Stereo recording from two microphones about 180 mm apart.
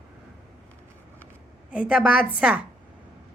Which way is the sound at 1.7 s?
5° right (ahead or behind).